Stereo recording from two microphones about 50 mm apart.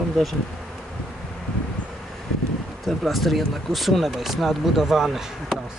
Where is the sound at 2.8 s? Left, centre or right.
Centre.